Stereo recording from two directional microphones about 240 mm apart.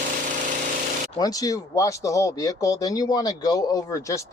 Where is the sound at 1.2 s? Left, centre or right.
Centre.